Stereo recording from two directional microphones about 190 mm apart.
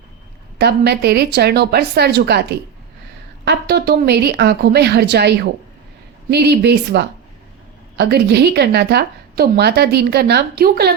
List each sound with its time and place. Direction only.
0.6 s a woman's voice: 60° right (ahead or behind)